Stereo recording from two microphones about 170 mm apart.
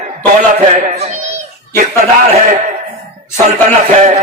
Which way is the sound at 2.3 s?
50° right (ahead or behind).